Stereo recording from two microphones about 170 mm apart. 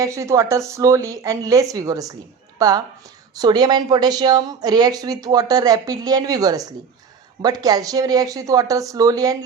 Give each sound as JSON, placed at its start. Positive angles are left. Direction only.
{"t": 0.0, "sound": "speech", "side_deg": -20}